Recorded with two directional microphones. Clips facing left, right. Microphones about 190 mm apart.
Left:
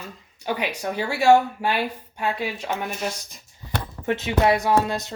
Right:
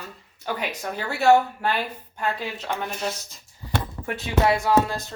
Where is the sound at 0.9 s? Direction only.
10° left (ahead or behind).